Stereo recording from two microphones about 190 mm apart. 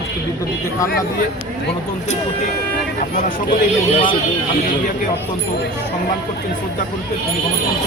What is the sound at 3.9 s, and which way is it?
Speech, 25° left (ahead or behind).